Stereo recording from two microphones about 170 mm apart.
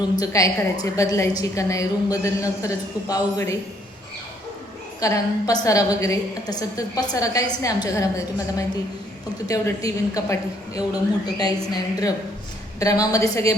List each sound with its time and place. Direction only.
0.2 s a woman's voice: 20° left (ahead or behind)
4.9 s a woman's voice: 20° left (ahead or behind)
11.3 s a woman's voice: 25° left (ahead or behind)